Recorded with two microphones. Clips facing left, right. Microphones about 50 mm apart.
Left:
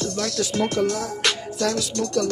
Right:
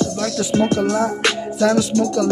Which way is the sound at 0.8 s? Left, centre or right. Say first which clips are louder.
Right 5 dB; right.